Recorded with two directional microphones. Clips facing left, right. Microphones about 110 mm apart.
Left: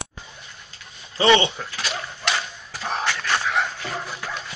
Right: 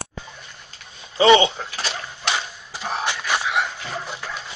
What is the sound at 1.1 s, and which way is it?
Speech, 20° right (ahead or behind).